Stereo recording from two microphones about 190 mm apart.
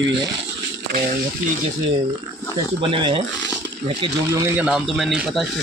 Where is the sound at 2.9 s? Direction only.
25° right (ahead or behind).